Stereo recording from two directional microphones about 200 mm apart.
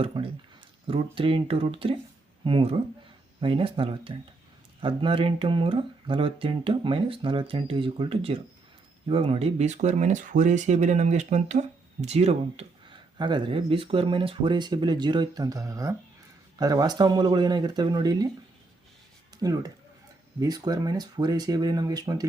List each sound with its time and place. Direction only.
0.0 s speech: 25° right (ahead or behind)
19.4 s speech: 20° right (ahead or behind)